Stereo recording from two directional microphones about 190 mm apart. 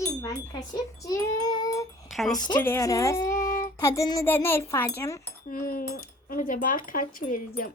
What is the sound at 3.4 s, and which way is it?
Child singing, 45° left (ahead or behind).